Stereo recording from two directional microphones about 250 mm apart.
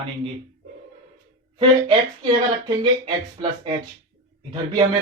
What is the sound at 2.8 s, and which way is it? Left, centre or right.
Speech, centre.